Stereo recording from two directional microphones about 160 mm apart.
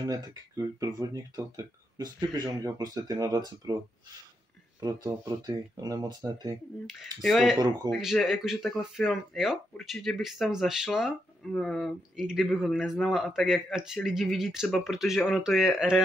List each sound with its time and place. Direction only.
0.0 s speech: 25° right (ahead or behind)
4.7 s speech: 25° right (ahead or behind)
7.2 s speech: centre (ahead or behind)
7.5 s speech: 25° right (ahead or behind)
7.9 s speech: centre (ahead or behind)